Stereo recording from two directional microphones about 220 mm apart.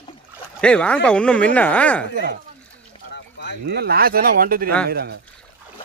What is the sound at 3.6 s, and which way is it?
Speech, 45° right (ahead or behind).